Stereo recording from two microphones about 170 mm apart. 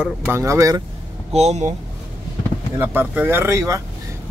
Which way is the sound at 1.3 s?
40° right (ahead or behind).